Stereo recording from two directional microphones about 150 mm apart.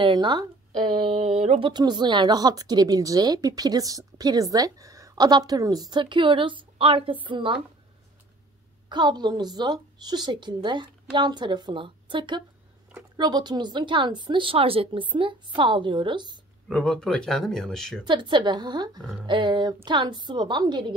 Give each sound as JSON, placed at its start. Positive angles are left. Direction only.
{"t": 0.0, "sound": "speech", "side_deg": -30}
{"t": 1.7, "sound": "a woman's voice", "side_deg": -30}
{"t": 8.8, "sound": "a woman's voice", "side_deg": -30}
{"t": 16.6, "sound": "speech", "side_deg": 5}
{"t": 18.0, "sound": "speech", "side_deg": -30}